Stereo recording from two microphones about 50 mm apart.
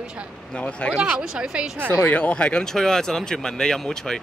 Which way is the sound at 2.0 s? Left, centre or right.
Left.